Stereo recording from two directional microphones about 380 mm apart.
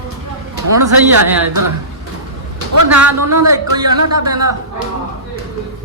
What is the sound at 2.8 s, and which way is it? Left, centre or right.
Speech, right.